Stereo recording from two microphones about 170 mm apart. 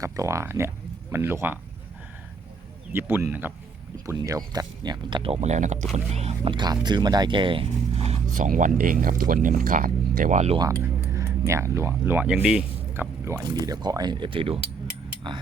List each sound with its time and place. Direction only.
0.0 s speech: 15° right (ahead or behind)
2.9 s speech: 10° right (ahead or behind); by 10.6 s 40° right (ahead or behind)
10.6 s speech: 15° right (ahead or behind)